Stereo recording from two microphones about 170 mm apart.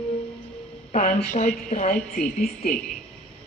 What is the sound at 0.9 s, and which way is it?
Speech, 45° left (ahead or behind).